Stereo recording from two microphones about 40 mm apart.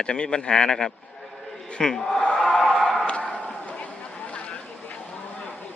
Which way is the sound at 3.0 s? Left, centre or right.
Left.